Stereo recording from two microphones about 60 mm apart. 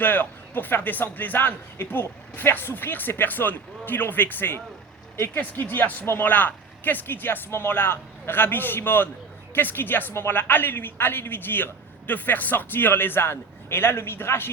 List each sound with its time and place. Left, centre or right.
0.0 s a woman's voice: left